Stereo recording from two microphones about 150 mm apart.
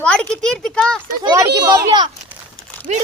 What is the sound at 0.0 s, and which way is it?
Speech, 5° left (ahead or behind).